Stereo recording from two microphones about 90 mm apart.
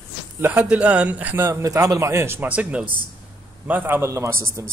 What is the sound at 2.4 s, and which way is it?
A man's voice, 15° right (ahead or behind).